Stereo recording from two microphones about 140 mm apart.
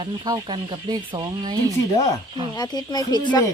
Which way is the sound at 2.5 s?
30° left (ahead or behind).